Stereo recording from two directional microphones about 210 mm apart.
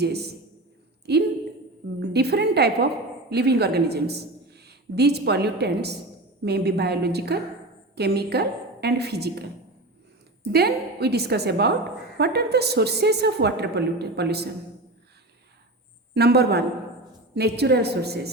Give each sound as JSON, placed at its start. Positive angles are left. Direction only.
{"t": 0.0, "sound": "a woman's voice", "side_deg": -50}
{"t": 10.4, "sound": "a woman's voice", "side_deg": -50}
{"t": 16.1, "sound": "a woman's voice", "side_deg": -50}